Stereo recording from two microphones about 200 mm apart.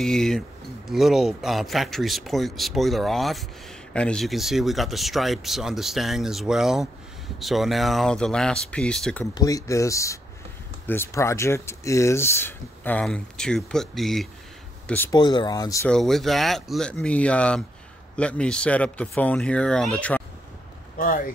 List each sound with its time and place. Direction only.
0.0 s speech: centre (ahead or behind)
9.2 s speech: 15° left (ahead or behind)
15.1 s speech: 20° left (ahead or behind)
15.9 s speech: centre (ahead or behind)